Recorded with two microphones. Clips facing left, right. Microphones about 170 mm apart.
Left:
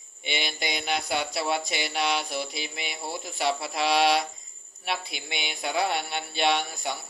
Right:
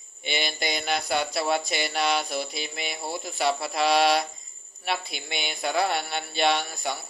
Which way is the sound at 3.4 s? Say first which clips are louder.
Right 2 dB; 15° left (ahead or behind).